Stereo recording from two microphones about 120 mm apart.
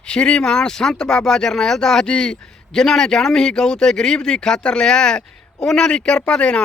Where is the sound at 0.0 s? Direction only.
10° left (ahead or behind).